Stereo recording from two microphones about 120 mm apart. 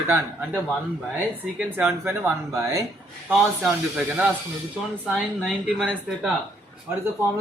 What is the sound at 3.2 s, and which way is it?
Speech, 5° right (ahead or behind).